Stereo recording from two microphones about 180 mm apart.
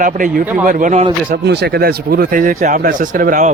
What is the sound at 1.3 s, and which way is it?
Speech, 70° right (ahead or behind).